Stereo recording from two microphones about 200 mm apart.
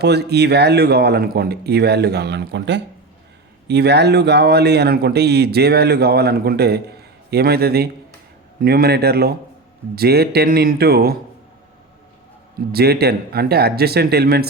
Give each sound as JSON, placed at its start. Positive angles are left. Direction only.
{"t": 0.0, "sound": "a man's voice", "side_deg": -55}
{"t": 12.7, "sound": "a man's voice", "side_deg": -50}